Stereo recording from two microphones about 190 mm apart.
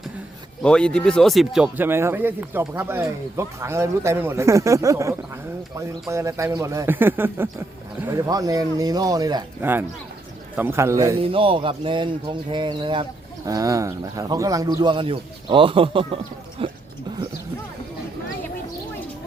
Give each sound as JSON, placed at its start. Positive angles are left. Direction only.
{"t": 0.6, "sound": "speech", "side_deg": 5}
{"t": 11.2, "sound": "speech", "side_deg": -30}